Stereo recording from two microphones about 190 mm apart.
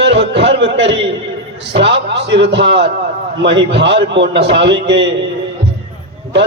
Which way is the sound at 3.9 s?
65° right (ahead or behind).